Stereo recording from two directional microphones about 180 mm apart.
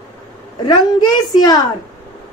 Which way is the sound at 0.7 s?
20° left (ahead or behind).